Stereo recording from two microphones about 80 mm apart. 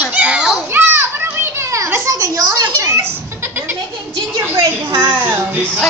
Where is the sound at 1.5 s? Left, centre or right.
Right.